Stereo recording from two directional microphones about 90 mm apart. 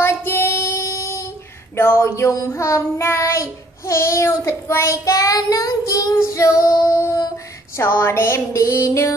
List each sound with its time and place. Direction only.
0.0 s female singing: 25° left (ahead or behind)
1.8 s child singing: 25° left (ahead or behind)